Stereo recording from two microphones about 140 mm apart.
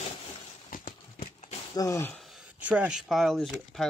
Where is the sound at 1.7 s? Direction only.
20° left (ahead or behind).